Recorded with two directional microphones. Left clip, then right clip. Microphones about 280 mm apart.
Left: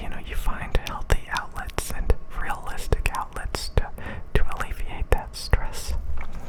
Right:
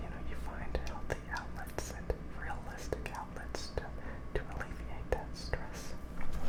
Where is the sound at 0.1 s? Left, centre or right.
Left.